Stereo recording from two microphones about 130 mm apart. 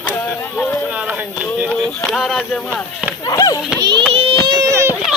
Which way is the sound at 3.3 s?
30° left (ahead or behind).